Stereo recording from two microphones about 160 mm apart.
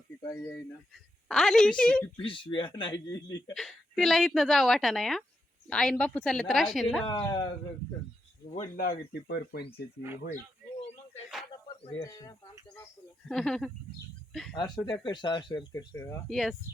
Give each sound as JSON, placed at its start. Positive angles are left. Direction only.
{"t": 1.3, "sound": "a woman's voice", "side_deg": 0}
{"t": 2.2, "sound": "speech", "side_deg": 35}
{"t": 3.5, "sound": "a woman's voice", "side_deg": 0}
{"t": 7.1, "sound": "speech", "side_deg": 25}
{"t": 8.7, "sound": "speech", "side_deg": 65}
{"t": 11.9, "sound": "speech", "side_deg": 20}
{"t": 13.2, "sound": "a woman's voice", "side_deg": 5}
{"t": 14.5, "sound": "speech", "side_deg": 25}
{"t": 16.2, "sound": "a woman's voice", "side_deg": 0}